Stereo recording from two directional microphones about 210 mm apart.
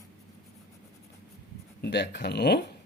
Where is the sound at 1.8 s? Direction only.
55° left (ahead or behind).